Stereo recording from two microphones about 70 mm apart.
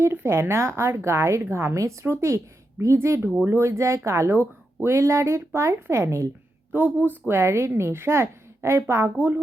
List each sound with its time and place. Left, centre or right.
0.0 s a woman's voice: right
6.7 s a woman's voice: right